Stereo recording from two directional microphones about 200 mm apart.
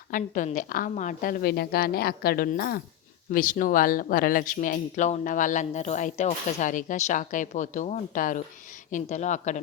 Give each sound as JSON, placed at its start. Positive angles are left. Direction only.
{"t": 0.1, "sound": "a woman's voice", "side_deg": 40}